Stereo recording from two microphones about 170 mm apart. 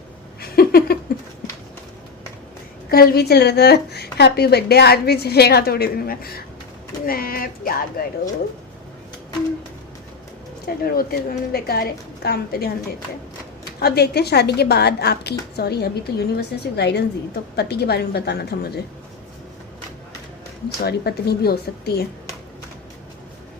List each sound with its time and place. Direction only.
0.5 s a sound: 65° left (ahead or behind)
2.9 s a woman's voice: 65° left (ahead or behind)
10.9 s a woman's voice: 60° left (ahead or behind)
13.8 s a woman's voice: 70° left (ahead or behind)
20.7 s a woman's voice: 70° left (ahead or behind)